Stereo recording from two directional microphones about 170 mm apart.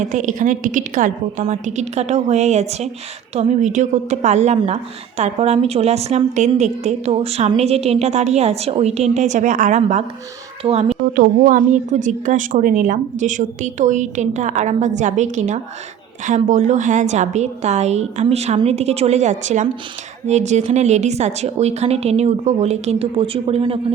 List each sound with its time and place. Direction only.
0.0 s a woman's voice: 45° right (ahead or behind)
11.0 s a woman's voice: 55° right (ahead or behind); by 23.8 s 35° right (ahead or behind)